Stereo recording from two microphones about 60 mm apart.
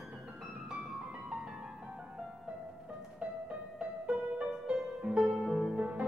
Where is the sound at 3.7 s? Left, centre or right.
Centre.